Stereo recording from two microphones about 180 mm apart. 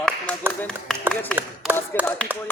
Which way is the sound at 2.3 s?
10° right (ahead or behind).